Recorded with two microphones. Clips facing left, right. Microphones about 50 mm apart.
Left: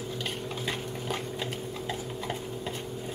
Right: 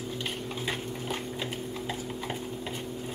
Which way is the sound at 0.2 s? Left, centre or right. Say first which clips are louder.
Left 1 dB; centre.